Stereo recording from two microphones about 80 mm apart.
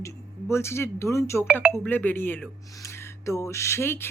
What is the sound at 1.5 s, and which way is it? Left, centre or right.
Speech, centre.